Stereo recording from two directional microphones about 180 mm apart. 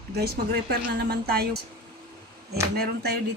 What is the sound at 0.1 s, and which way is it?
Speech, 60° right (ahead or behind).